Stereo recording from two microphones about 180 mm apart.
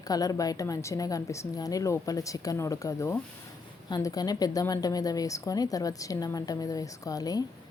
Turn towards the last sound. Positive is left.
turn(degrees=20)  # may be behind; listen again after turning